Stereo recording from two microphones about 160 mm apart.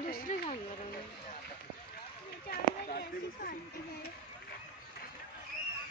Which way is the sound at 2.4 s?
75° left (ahead or behind).